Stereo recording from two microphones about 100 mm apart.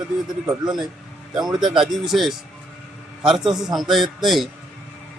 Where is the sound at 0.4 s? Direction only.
5° right (ahead or behind).